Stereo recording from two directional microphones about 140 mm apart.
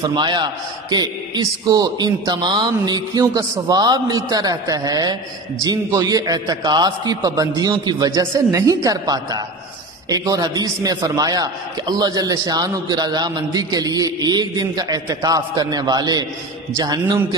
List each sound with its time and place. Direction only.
0.0 s a man's voice: 30° right (ahead or behind)